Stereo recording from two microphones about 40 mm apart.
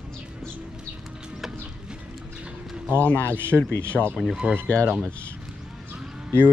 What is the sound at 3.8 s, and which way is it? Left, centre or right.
Speech, right.